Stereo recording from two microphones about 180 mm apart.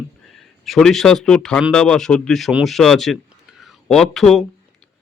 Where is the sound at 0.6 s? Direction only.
Centre (ahead or behind).